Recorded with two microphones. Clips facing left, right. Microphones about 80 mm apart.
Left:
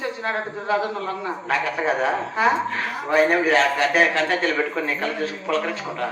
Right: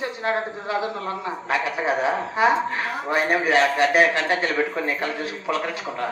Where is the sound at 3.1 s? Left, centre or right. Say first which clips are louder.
Left 2 dB; centre.